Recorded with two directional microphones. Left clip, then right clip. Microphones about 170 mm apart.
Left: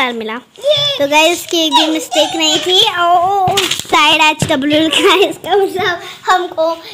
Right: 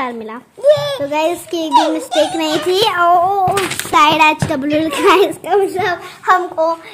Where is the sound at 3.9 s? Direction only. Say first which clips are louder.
Even; 15° left (ahead or behind).